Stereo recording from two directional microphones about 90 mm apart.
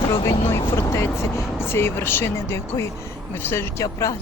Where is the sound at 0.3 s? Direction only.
30° left (ahead or behind).